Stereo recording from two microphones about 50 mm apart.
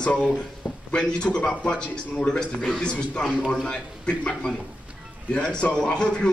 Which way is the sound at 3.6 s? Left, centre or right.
Centre.